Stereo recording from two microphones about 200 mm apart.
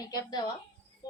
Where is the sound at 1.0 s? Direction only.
20° left (ahead or behind).